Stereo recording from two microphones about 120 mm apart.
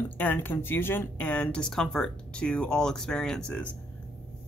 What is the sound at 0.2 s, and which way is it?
Speech, 15° left (ahead or behind).